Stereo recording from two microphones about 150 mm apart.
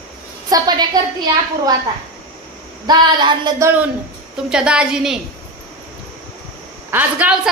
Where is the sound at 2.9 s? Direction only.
30° right (ahead or behind).